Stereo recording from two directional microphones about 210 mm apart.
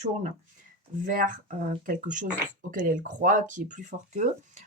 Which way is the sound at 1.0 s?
40° right (ahead or behind).